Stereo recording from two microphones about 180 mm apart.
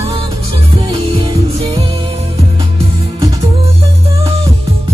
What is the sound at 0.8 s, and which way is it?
Music, 30° right (ahead or behind).